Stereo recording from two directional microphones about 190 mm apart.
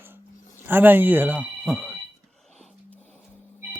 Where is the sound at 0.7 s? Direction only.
10° right (ahead or behind).